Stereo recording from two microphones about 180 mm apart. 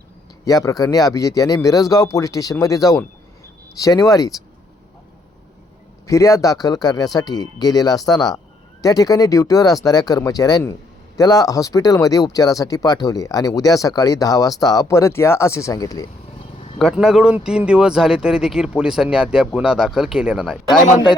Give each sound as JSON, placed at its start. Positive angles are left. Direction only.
{"t": 0.4, "sound": "speech", "side_deg": 20}
{"t": 6.1, "sound": "speech", "side_deg": 15}
{"t": 16.7, "sound": "a man's voice", "side_deg": 0}